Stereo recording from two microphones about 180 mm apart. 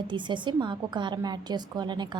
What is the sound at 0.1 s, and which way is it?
A woman's voice, 25° right (ahead or behind).